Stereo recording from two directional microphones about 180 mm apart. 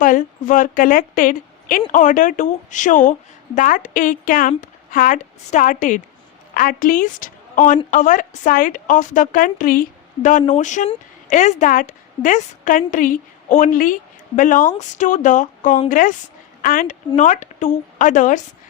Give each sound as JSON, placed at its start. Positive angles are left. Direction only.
{"t": 0.0, "sound": "a woman's voice", "side_deg": 45}